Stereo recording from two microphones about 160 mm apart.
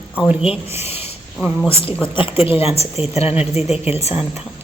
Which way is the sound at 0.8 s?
40° left (ahead or behind).